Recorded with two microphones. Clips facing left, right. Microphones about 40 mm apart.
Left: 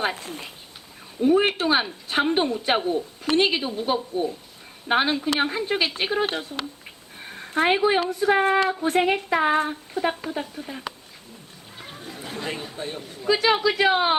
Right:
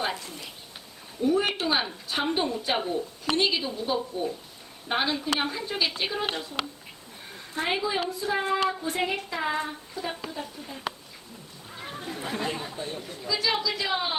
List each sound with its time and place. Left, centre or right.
0.0 s speech: left
7.3 s a sound: left
8.1 s speech: left
10.4 s speech: left
11.9 s chatter: right
12.7 s speech: left
13.2 s speech: left